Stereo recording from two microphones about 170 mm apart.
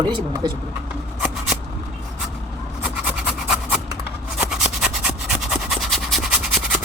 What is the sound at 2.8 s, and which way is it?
Pant, 5° right (ahead or behind).